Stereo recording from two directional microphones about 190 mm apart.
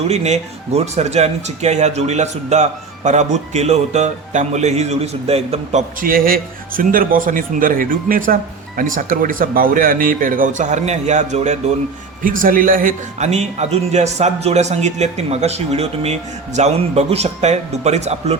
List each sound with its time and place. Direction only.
0.1 s speech: 35° right (ahead or behind)
6.0 s speech: 50° right (ahead or behind)